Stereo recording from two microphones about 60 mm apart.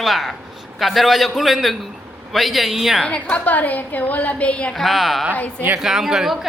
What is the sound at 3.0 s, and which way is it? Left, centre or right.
A woman's voice, centre.